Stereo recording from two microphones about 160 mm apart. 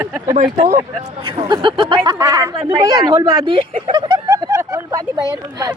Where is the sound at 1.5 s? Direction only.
30° right (ahead or behind).